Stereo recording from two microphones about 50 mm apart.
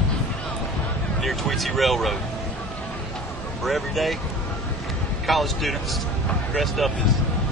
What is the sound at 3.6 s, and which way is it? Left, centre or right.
A man's voice, centre.